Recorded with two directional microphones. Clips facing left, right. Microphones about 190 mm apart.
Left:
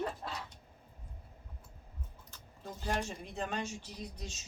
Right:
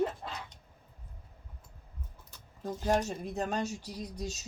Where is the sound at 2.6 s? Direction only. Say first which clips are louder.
Right 7 dB; 40° right (ahead or behind).